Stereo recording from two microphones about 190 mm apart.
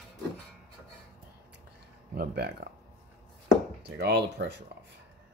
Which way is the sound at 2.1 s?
55° right (ahead or behind).